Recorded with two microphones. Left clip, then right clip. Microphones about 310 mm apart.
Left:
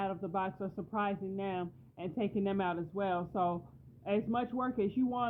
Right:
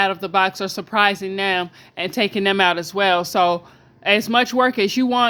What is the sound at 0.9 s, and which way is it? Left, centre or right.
Speech, right.